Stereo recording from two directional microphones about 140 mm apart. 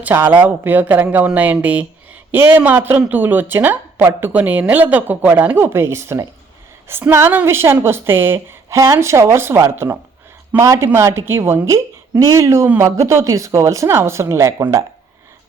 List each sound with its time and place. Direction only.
0.0 s a woman's voice: 15° right (ahead or behind)